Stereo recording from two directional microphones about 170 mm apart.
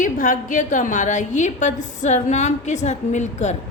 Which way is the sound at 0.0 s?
50° left (ahead or behind).